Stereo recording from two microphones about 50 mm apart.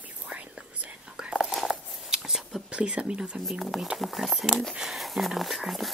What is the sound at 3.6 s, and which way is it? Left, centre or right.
Speech, centre.